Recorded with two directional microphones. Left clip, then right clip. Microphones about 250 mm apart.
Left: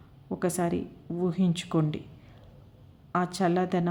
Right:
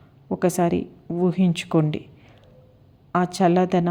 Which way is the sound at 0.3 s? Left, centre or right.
Centre.